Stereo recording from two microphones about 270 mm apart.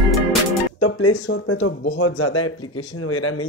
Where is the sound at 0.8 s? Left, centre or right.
Left.